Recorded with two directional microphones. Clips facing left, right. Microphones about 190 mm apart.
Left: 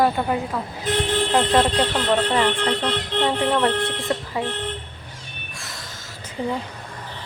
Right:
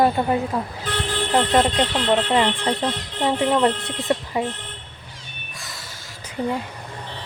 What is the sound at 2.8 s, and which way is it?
Music, 70° left (ahead or behind).